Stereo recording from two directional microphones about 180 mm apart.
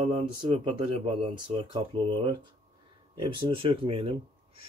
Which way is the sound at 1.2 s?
30° right (ahead or behind).